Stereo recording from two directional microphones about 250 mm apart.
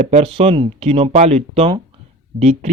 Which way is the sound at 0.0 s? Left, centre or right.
Right.